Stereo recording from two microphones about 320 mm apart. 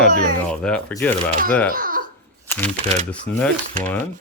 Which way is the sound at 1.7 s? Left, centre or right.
Right.